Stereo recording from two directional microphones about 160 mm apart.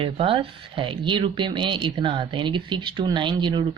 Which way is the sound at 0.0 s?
35° right (ahead or behind).